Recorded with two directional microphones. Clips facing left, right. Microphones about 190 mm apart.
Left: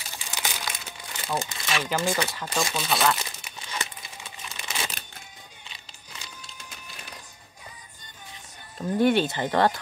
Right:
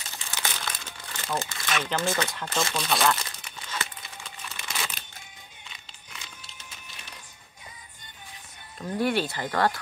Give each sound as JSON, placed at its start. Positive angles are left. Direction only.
{"t": 0.2, "sound": "crumpling", "side_deg": 15}
{"t": 2.0, "sound": "speech", "side_deg": 15}
{"t": 3.3, "sound": "crumpling", "side_deg": 15}
{"t": 8.8, "sound": "speech", "side_deg": 20}